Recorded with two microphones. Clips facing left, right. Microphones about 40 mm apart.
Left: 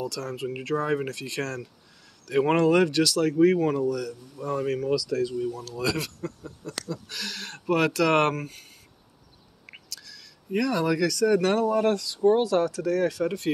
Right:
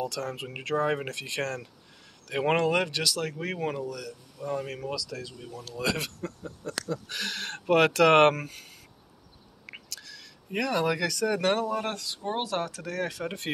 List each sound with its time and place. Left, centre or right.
0.0 s speech: right
2.5 s speech: centre
3.5 s speech: right
3.8 s speech: centre
5.6 s speech: right
8.4 s speech: right
9.8 s speech: right
11.9 s speech: right